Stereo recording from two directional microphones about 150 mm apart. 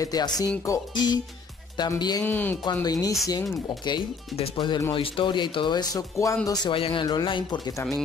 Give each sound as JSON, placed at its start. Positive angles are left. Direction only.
{"t": 0.0, "sound": "speech", "side_deg": 25}
{"t": 2.2, "sound": "speech", "side_deg": 15}
{"t": 2.6, "sound": "speech", "side_deg": 25}